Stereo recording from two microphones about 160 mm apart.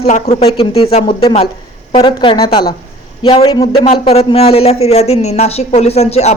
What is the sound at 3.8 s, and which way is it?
Speech, 45° left (ahead or behind).